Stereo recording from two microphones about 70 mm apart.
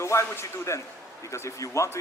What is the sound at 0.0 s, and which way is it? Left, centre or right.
Speech, left.